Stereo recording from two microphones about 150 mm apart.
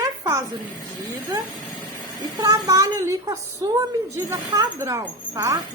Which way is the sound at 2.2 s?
25° right (ahead or behind).